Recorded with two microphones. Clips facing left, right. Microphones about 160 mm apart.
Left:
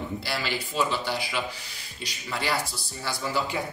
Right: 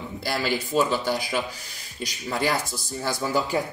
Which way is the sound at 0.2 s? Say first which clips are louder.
Right 5 dB; 45° right (ahead or behind).